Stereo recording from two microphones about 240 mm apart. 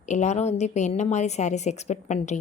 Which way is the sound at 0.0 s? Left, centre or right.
Left.